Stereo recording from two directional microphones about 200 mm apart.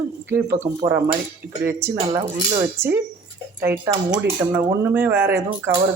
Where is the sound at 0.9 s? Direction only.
15° right (ahead or behind).